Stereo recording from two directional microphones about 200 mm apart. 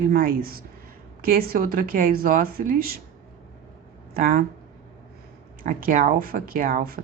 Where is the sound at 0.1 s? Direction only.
50° right (ahead or behind).